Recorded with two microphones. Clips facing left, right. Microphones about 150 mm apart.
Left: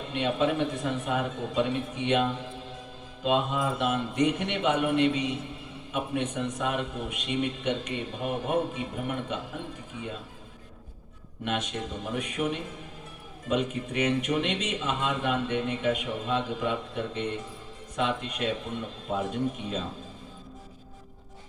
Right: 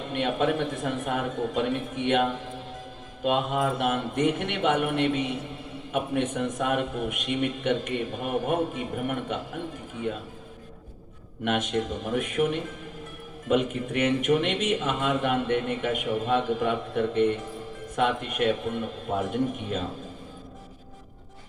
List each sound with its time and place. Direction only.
0.1 s a man's voice: 55° right (ahead or behind)
3.2 s a man's voice: 55° right (ahead or behind)
11.4 s a man's voice: 50° right (ahead or behind)